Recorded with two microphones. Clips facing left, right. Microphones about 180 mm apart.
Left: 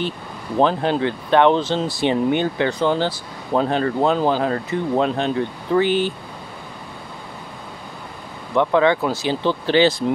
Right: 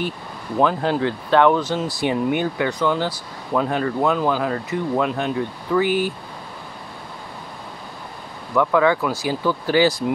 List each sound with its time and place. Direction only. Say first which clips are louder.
0.6 s speech: left 1 dB; 25° left (ahead or behind)
8.5 s speech: left 1 dB; 25° left (ahead or behind)